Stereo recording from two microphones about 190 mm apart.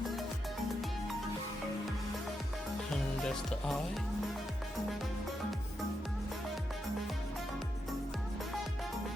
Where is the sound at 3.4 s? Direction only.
Centre (ahead or behind).